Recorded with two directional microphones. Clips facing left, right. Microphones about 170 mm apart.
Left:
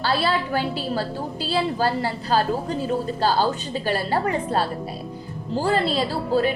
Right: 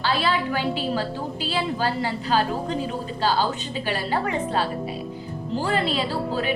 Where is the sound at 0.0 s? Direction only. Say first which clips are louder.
Left 1 dB; 40° left (ahead or behind).